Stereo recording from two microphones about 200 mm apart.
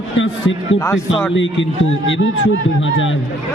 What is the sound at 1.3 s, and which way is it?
Speech, 70° left (ahead or behind).